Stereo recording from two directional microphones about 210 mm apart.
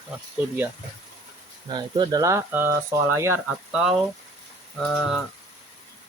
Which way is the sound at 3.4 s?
Centre (ahead or behind).